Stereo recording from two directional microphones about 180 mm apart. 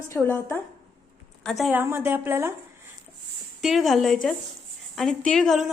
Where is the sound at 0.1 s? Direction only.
15° left (ahead or behind).